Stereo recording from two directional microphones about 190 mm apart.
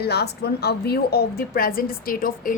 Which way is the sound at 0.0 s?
60° left (ahead or behind).